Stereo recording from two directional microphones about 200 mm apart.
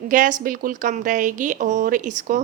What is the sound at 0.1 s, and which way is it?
A woman's voice, 40° right (ahead or behind).